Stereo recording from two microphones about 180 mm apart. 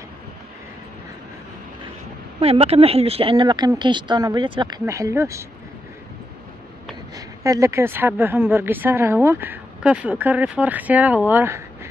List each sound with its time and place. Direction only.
2.4 s speech: 35° right (ahead or behind); by 5.5 s 15° right (ahead or behind)
7.2 s speech: 20° right (ahead or behind)